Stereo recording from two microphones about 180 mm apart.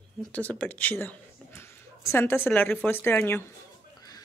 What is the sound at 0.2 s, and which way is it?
Speech, 5° left (ahead or behind).